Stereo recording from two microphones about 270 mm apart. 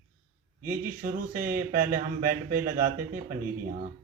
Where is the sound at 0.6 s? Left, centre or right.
Right.